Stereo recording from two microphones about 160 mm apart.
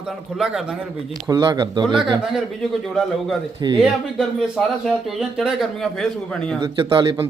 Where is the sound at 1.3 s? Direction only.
25° right (ahead or behind).